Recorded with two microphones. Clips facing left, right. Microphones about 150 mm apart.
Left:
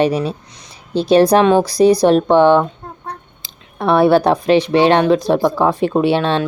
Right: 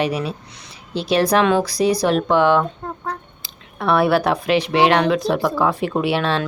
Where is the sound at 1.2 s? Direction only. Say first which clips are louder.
Left 3 dB; 25° left (ahead or behind).